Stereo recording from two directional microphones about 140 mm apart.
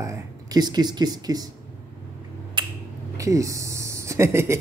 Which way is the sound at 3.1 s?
20° right (ahead or behind).